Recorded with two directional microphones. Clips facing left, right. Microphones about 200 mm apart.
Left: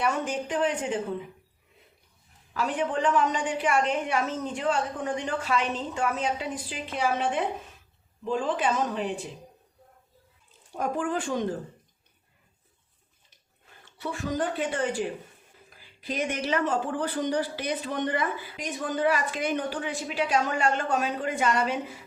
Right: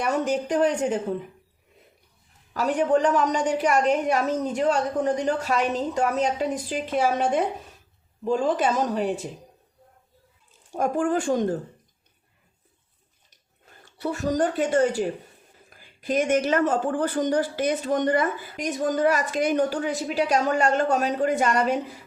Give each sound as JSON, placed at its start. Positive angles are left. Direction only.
{"t": 0.0, "sound": "a woman's voice", "side_deg": -40}
{"t": 2.5, "sound": "a woman's voice", "side_deg": -40}
{"t": 10.7, "sound": "speech", "side_deg": -45}
{"t": 13.8, "sound": "speech", "side_deg": -40}